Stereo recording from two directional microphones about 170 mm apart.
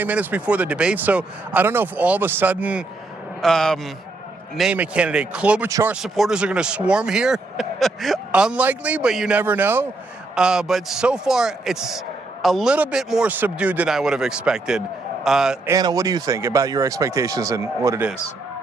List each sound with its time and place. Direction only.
0.0 s speech: 10° right (ahead or behind)
3.4 s speech: 5° left (ahead or behind)
15.7 s speech: 20° right (ahead or behind)